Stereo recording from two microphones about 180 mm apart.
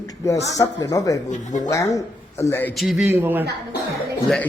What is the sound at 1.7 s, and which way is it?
Speech, 15° left (ahead or behind).